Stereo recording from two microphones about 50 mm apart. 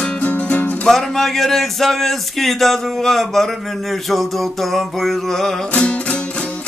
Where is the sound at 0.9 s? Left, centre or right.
Centre.